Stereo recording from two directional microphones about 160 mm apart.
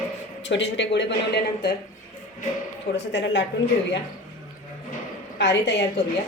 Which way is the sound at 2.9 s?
90° left.